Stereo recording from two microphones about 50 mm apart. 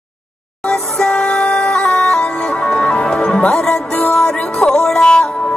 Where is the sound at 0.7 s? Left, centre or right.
Centre.